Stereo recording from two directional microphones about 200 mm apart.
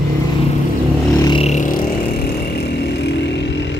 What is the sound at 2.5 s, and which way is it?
Vehicle, 55° left (ahead or behind).